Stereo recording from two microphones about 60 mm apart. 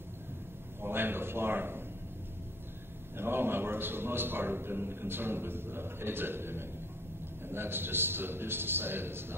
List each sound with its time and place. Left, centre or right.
0.7 s a man's voice: right
3.2 s a man's voice: right